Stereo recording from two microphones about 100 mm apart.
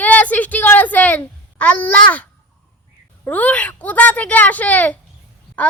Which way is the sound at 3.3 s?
15° left (ahead or behind).